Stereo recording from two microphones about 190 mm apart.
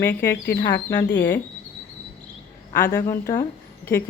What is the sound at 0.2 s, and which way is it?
Speech, 15° left (ahead or behind).